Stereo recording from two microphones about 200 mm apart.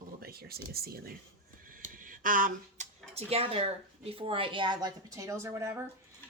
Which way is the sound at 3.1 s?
30° right (ahead or behind).